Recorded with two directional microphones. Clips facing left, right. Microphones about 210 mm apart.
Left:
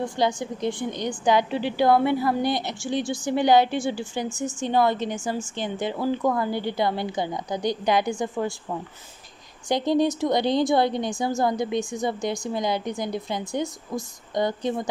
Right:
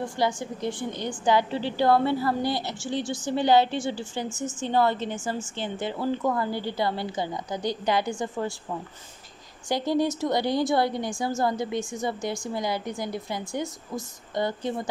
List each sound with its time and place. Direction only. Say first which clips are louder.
0.2 s a woman's voice: left 2 dB; 15° left (ahead or behind)
9.7 s a woman's voice: left 3 dB; 20° left (ahead or behind)